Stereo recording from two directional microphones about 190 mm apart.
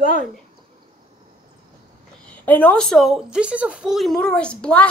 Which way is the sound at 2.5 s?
10° left (ahead or behind).